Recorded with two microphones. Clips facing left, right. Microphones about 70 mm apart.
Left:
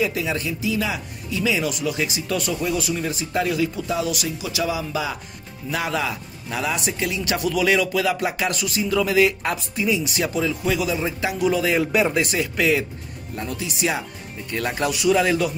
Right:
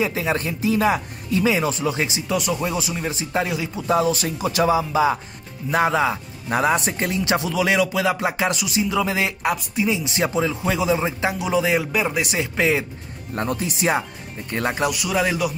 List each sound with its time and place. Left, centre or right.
0.0 s speech: right
3.8 s speech: right
6.5 s speech: right
9.4 s speech: centre
9.8 s speech: right
11.8 s speech: centre
12.2 s speech: right
13.3 s speech: right
14.9 s speech: centre